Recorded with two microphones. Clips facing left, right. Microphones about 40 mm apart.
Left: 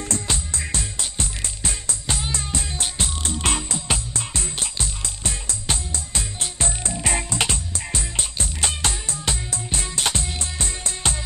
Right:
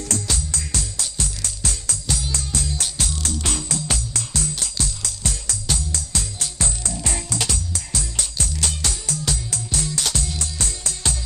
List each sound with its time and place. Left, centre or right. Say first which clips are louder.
0.0 s music: even; left